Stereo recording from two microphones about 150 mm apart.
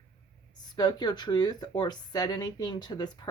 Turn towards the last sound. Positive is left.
turn(degrees=25)  # may be behind; listen again after turning